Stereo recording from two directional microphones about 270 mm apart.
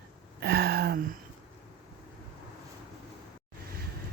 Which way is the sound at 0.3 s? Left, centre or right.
Right.